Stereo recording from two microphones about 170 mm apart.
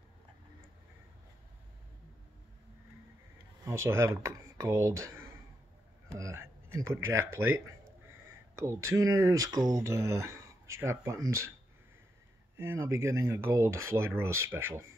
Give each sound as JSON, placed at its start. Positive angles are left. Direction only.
{"t": 3.6, "sound": "speech", "side_deg": -15}
{"t": 12.5, "sound": "speech", "side_deg": -15}